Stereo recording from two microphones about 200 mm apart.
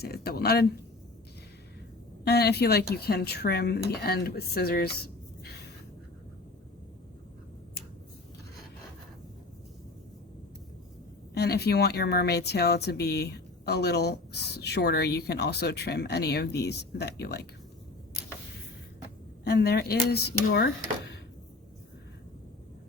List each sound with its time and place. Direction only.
0.0 s speech: 50° left (ahead or behind)
2.2 s speech: 55° left (ahead or behind)
11.3 s speech: 55° left (ahead or behind)
19.5 s speech: 55° left (ahead or behind)